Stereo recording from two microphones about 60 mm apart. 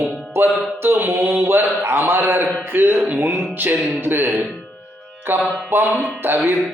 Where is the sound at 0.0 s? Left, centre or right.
Right.